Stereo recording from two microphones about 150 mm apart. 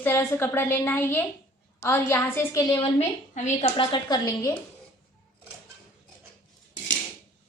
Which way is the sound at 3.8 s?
30° left (ahead or behind).